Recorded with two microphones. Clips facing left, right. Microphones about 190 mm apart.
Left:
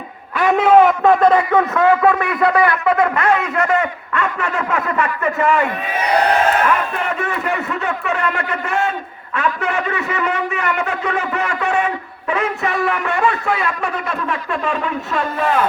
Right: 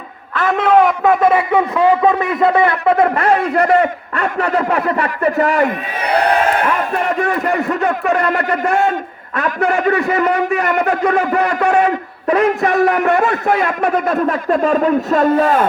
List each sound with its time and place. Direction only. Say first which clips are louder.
0.3 s a man's voice: left 1 dB; 10° left (ahead or behind); by 15.6 s 40° right (ahead or behind)